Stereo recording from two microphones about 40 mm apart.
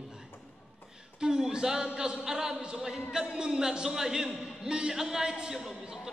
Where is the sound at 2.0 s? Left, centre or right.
Centre.